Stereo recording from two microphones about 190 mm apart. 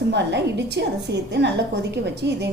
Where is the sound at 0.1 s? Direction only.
65° right (ahead or behind).